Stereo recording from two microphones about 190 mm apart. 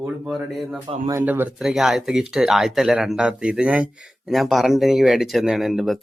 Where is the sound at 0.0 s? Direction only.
Centre (ahead or behind).